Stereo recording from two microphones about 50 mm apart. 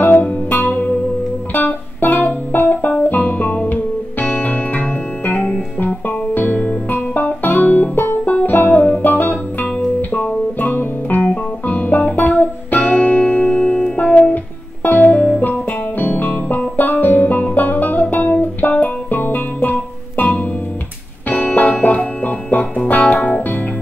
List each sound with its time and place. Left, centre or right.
0.0 s music: left
2.2 s guitar: left
8.3 s music: left
8.5 s music: left
14.3 s music: left
21.3 s music: left